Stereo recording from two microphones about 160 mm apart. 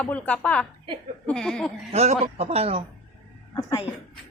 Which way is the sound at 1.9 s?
40° right (ahead or behind).